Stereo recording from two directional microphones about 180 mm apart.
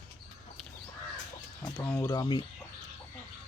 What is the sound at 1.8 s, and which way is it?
Speech, 10° left (ahead or behind).